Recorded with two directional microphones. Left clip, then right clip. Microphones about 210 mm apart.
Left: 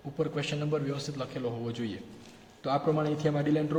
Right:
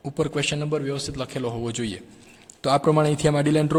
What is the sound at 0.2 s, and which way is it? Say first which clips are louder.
A man's voice: right 7 dB; 45° right (ahead or behind).